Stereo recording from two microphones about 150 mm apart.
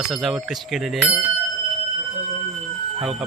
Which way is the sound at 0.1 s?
Centre (ahead or behind).